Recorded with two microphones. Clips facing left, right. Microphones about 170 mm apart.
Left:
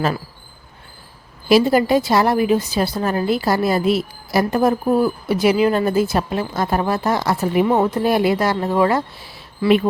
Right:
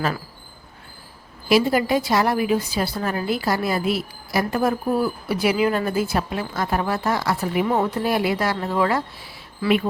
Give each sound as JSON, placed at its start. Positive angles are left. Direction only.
{"t": 1.5, "sound": "a woman's voice", "side_deg": 30}